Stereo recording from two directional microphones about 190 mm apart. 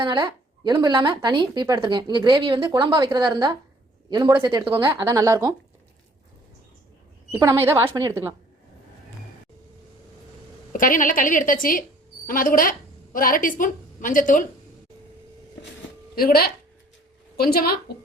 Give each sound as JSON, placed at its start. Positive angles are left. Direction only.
{"t": 0.0, "sound": "a woman's voice", "side_deg": -25}
{"t": 7.3, "sound": "speech", "side_deg": -15}
{"t": 10.7, "sound": "a woman's voice", "side_deg": 45}
{"t": 16.1, "sound": "a woman's voice", "side_deg": 50}